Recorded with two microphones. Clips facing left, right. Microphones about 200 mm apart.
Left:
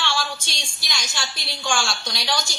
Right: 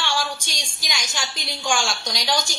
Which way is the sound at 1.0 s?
15° right (ahead or behind).